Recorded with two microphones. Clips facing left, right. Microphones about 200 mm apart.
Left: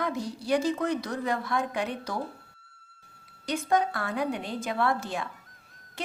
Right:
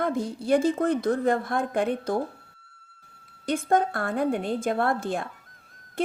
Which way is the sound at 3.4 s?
50° right (ahead or behind).